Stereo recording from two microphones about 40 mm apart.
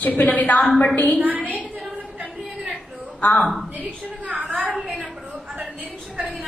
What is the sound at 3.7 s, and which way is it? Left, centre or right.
Speech, right.